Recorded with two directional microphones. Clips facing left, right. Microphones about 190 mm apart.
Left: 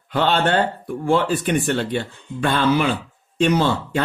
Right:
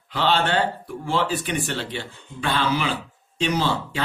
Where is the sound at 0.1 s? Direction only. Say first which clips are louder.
Left 3 dB; 55° left (ahead or behind).